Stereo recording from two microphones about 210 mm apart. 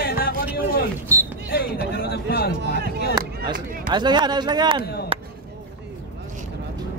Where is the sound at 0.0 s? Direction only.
45° left (ahead or behind).